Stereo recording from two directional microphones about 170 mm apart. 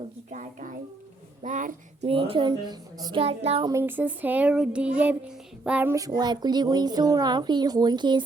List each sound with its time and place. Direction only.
0.3 s speech: 45° right (ahead or behind)
2.0 s a child's voice: 35° right (ahead or behind)
3.7 s speech: 15° right (ahead or behind)